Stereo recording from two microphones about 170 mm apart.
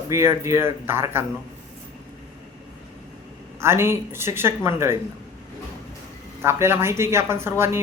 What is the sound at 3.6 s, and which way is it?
Speech, 15° right (ahead or behind).